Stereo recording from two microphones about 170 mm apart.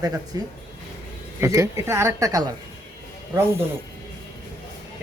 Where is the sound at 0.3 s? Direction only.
20° right (ahead or behind).